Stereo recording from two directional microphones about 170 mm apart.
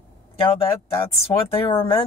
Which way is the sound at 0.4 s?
30° left (ahead or behind).